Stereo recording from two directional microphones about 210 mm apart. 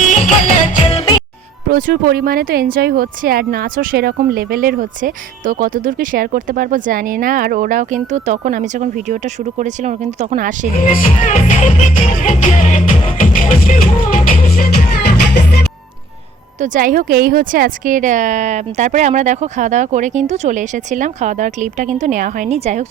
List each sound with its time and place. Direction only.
0.2 s music: 35° left (ahead or behind)
1.7 s speech: 45° right (ahead or behind)
10.8 s speech: 40° left (ahead or behind)
12.2 s music: 35° left (ahead or behind)
16.6 s speech: 40° right (ahead or behind)